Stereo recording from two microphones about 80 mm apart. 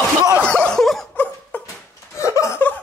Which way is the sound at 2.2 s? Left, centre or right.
Left.